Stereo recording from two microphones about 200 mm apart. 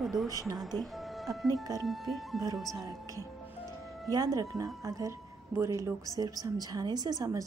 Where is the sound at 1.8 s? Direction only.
Centre (ahead or behind).